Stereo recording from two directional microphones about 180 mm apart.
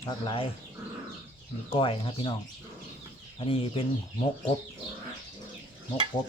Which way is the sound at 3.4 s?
30° left (ahead or behind).